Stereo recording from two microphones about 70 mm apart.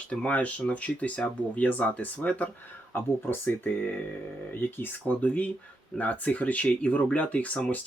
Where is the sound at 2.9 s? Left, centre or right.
Left.